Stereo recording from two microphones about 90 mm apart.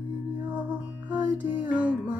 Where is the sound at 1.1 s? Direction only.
20° right (ahead or behind).